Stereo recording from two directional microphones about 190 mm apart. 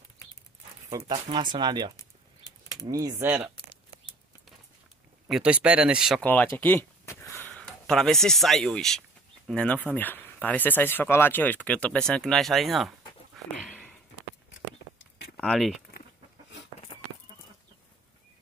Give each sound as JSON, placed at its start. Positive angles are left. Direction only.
{"t": 0.9, "sound": "speech", "side_deg": -20}
{"t": 2.9, "sound": "speech", "side_deg": -15}
{"t": 5.3, "sound": "speech", "side_deg": -5}
{"t": 6.2, "sound": "speech", "side_deg": 10}
{"t": 13.7, "sound": "a sound", "side_deg": 0}
{"t": 15.3, "sound": "speech", "side_deg": 0}